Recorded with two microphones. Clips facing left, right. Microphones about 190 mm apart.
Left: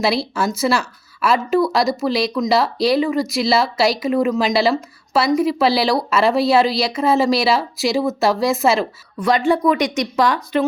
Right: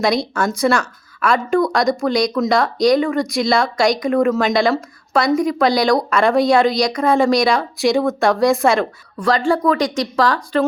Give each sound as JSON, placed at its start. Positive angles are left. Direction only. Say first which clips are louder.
{"t": 0.0, "sound": "speech", "louder": "right 1 dB", "side_deg": 5}
{"t": 10.2, "sound": "speech", "louder": "right 2 dB", "side_deg": 15}